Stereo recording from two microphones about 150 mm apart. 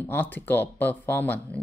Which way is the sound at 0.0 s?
10° left (ahead or behind).